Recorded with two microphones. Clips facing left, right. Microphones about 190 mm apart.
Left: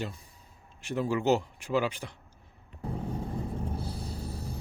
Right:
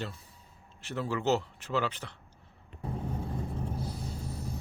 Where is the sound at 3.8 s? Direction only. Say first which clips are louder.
Even; 30° left (ahead or behind).